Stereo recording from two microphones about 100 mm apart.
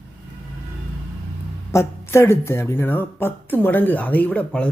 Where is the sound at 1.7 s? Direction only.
25° left (ahead or behind).